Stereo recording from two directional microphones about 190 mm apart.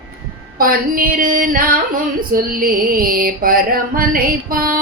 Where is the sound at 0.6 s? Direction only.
50° right (ahead or behind).